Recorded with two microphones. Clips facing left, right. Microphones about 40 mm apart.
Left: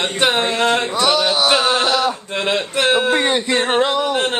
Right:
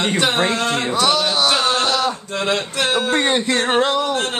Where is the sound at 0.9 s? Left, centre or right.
Centre.